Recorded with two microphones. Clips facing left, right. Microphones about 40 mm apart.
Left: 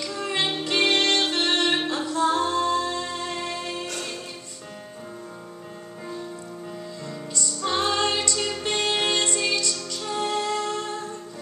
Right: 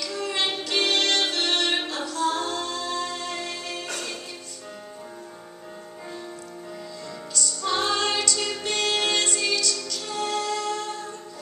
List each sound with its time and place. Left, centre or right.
0.0 s music: left
7.3 s music: left